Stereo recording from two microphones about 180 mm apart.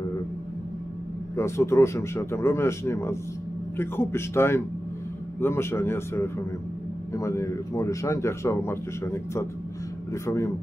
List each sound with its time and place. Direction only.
1.3 s a man's voice: 15° left (ahead or behind)